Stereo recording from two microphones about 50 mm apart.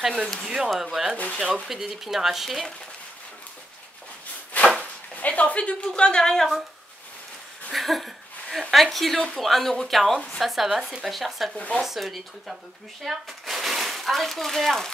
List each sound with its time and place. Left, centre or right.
0.7 s speech: centre
1.1 s speech: left
1.7 s speech: centre
4.5 s a sound: left
5.1 s speech: left; by 6.5 s centre
7.7 s speech: centre
11.5 s speech: left
11.8 s speech: centre